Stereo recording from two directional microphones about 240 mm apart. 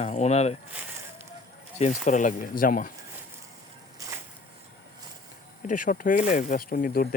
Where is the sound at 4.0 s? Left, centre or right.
Centre.